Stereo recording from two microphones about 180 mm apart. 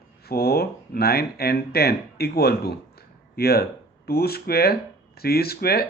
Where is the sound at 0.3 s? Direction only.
60° left (ahead or behind).